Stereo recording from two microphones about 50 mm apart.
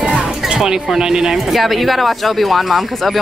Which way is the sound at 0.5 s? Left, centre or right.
Centre.